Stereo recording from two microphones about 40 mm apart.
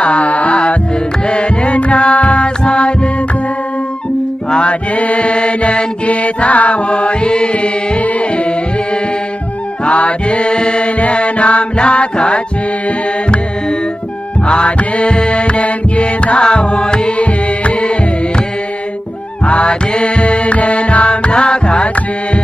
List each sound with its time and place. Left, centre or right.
0.0 s music: left
4.5 s mantra: left
9.8 s music: left
14.5 s music: left
19.4 s music: left